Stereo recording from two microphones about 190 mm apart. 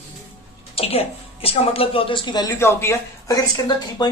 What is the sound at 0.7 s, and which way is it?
Speech, 30° left (ahead or behind).